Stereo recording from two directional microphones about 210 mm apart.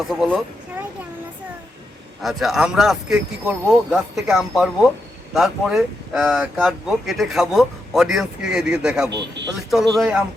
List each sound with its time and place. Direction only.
0.1 s speech: centre (ahead or behind)
2.2 s speech: centre (ahead or behind)
9.1 s speech: 55° right (ahead or behind)
9.9 s speech: centre (ahead or behind)